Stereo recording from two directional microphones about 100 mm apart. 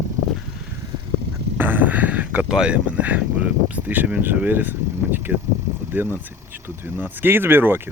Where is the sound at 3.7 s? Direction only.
15° right (ahead or behind).